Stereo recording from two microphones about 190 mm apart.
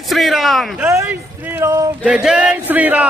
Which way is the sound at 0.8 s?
15° right (ahead or behind).